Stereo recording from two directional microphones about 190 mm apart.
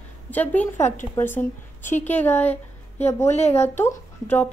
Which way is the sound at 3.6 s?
10° left (ahead or behind).